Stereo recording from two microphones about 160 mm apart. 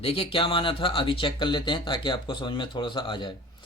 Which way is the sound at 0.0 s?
35° left (ahead or behind).